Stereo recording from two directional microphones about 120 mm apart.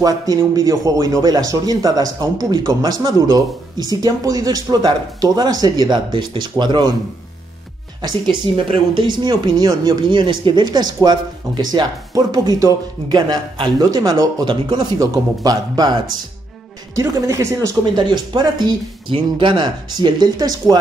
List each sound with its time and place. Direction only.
0.0 s a man's voice: 30° right (ahead or behind)
8.9 s a man's voice: 40° right (ahead or behind)
17.9 s a man's voice: 40° right (ahead or behind)